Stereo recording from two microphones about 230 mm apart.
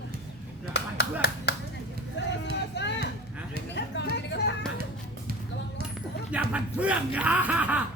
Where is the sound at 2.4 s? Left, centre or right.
Left.